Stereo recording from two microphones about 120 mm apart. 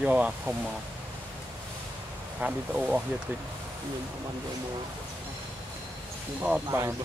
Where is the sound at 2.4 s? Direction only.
10° right (ahead or behind).